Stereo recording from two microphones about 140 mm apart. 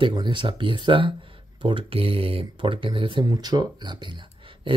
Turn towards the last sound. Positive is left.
turn(degrees=-35)  # may be behind; listen again after turning